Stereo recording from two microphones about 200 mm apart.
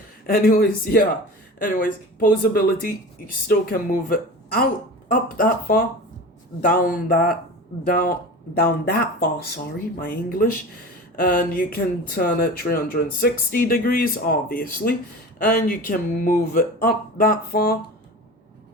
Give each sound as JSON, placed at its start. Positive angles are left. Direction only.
{"t": 0.3, "sound": "speech", "side_deg": 45}